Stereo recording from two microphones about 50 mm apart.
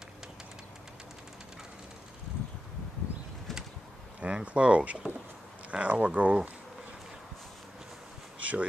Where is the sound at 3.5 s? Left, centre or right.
Centre.